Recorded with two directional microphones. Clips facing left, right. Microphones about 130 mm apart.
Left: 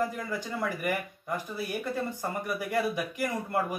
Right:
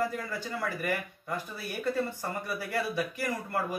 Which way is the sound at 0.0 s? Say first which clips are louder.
Left 1 dB; 20° left (ahead or behind).